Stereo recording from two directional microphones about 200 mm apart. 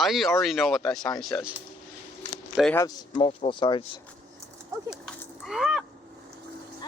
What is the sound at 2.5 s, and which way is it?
Speech, centre (ahead or behind).